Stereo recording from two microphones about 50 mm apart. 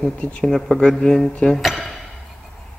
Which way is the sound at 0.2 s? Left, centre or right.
Left.